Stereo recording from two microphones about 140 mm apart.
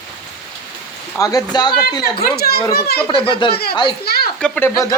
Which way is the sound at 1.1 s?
20° left (ahead or behind).